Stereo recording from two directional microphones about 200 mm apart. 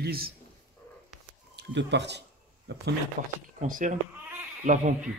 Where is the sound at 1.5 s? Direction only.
60° right (ahead or behind).